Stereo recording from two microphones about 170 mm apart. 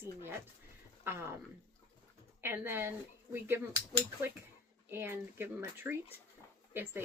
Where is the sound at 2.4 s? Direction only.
15° right (ahead or behind).